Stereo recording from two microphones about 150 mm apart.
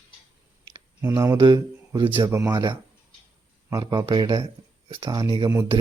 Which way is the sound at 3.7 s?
30° right (ahead or behind).